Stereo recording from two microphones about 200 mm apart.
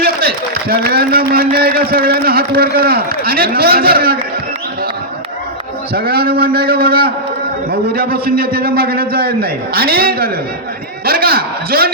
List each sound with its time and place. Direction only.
0.0 s a man's voice: 50° right (ahead or behind)
5.9 s a man's voice: 50° right (ahead or behind)